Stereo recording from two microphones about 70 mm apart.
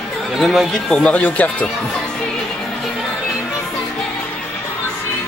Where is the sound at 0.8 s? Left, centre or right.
Centre.